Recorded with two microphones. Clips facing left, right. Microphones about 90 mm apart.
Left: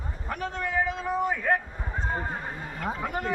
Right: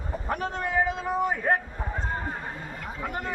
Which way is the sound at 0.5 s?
15° right (ahead or behind).